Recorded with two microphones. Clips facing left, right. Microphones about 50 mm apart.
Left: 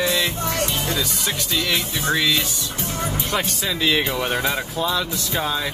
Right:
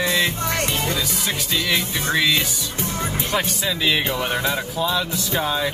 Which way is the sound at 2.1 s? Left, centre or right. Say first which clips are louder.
Right 2 dB; centre.